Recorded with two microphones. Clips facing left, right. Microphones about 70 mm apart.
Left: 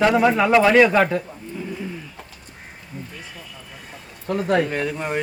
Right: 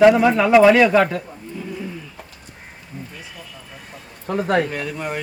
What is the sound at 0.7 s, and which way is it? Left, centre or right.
Speech, centre.